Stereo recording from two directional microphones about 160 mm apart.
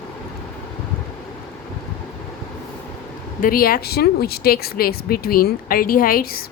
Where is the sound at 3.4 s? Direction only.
65° left (ahead or behind).